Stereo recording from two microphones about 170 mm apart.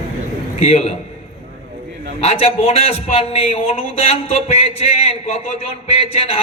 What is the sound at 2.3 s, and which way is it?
A man's voice, 35° left (ahead or behind).